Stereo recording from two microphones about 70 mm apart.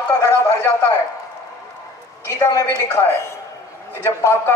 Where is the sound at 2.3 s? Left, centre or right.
Left.